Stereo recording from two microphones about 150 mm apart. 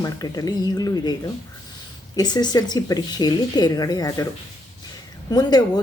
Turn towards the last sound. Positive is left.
turn(degrees=25)  # may be behind; listen again after turning